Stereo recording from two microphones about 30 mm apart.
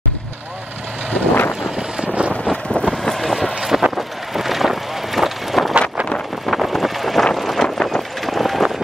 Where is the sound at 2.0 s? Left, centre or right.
Right.